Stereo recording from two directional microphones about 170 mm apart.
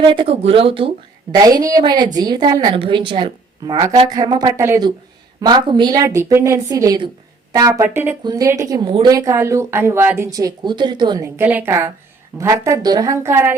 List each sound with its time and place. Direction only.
0.0 s a woman's voice: 30° right (ahead or behind)
11.3 s a woman's voice: 10° right (ahead or behind)